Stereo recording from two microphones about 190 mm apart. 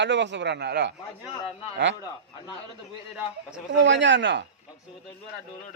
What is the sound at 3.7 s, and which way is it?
Speech, 70° right (ahead or behind).